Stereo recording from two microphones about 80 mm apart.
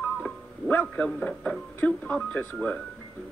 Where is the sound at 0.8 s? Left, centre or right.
Centre.